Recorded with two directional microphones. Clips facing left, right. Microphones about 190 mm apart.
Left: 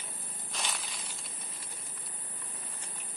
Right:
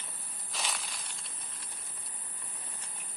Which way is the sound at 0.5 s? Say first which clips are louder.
Even; centre (ahead or behind).